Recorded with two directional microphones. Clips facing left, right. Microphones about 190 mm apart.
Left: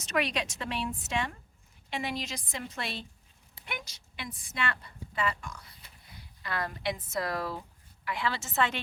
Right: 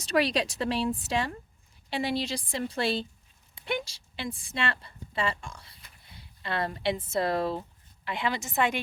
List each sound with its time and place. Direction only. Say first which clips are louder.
0.0 s a woman's voice: right 5 dB; 35° right (ahead or behind); by 8.8 s 15° right (ahead or behind)